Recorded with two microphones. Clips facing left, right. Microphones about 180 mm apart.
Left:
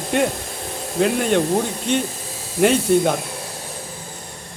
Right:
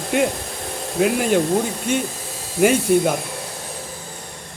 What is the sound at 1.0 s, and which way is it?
Speech, 5° right (ahead or behind).